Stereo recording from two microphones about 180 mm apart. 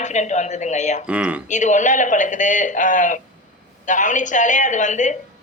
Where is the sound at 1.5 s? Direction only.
40° left (ahead or behind).